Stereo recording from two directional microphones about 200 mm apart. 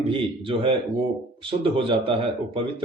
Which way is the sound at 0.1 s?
25° right (ahead or behind).